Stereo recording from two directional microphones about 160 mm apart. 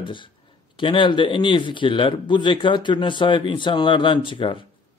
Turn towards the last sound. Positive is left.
turn(degrees=30)  # may be behind; listen again after turning